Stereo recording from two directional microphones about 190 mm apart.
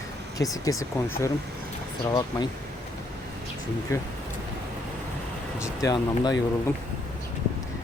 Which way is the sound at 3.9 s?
15° left (ahead or behind).